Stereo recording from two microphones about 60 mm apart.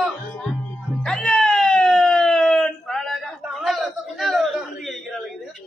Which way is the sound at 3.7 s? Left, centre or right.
Centre.